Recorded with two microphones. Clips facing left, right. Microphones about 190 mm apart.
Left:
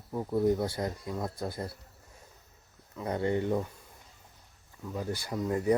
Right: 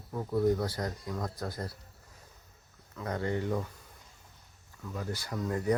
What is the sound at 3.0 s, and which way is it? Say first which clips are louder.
Speech: left 3 dB; 20° left (ahead or behind).